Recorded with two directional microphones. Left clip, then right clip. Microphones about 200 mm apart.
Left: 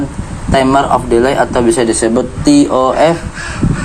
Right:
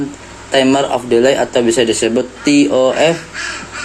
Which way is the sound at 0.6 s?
5° right (ahead or behind).